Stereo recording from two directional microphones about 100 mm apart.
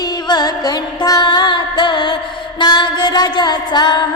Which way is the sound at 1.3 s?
50° left (ahead or behind).